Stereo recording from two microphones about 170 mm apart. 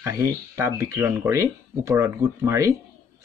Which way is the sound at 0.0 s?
15° right (ahead or behind).